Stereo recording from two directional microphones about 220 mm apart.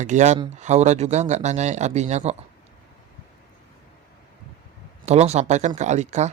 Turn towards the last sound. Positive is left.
turn(degrees=-30)  # may be behind; listen again after turning